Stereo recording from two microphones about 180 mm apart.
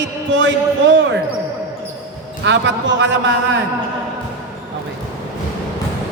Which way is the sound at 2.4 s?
80° right.